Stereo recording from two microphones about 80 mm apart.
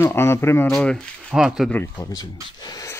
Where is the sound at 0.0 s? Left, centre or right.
Left.